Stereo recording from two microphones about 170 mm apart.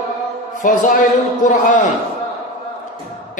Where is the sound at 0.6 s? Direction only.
50° left (ahead or behind).